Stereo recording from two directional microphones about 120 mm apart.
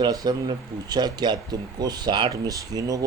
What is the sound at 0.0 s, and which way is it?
Speech, 35° right (ahead or behind).